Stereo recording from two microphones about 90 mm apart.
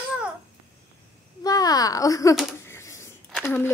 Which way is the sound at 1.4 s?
45° left (ahead or behind).